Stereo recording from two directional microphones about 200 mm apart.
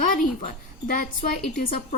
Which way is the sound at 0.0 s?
40° left (ahead or behind).